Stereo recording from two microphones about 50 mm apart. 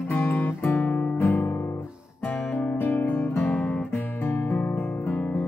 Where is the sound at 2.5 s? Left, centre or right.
Left.